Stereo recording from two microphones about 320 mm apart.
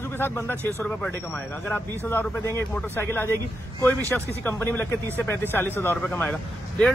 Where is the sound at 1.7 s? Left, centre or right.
Centre.